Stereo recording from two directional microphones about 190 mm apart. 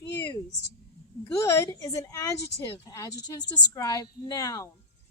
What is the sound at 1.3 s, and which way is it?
Speech, 15° left (ahead or behind).